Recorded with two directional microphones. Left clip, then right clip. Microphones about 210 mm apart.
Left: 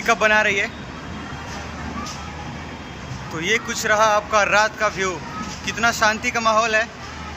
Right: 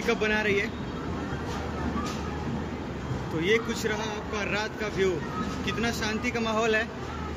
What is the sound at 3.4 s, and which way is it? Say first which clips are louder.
Speech: left 4 dB; 5° right (ahead or behind).